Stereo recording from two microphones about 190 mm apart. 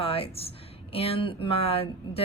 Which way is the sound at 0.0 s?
30° left (ahead or behind).